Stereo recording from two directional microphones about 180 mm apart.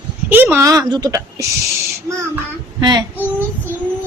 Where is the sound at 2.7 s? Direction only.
25° right (ahead or behind).